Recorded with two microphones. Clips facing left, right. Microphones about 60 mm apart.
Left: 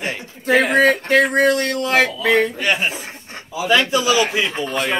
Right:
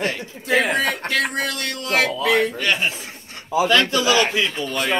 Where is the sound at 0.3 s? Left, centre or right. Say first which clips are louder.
Left 5 dB; left.